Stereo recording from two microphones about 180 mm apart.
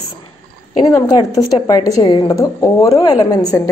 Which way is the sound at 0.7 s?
20° left (ahead or behind).